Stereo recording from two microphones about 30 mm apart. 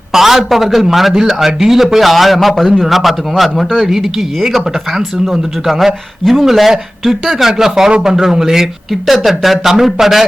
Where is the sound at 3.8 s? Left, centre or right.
Centre.